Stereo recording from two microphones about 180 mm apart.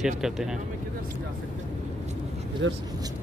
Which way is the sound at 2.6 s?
90° right.